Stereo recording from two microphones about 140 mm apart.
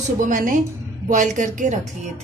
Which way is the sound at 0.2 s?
65° right (ahead or behind).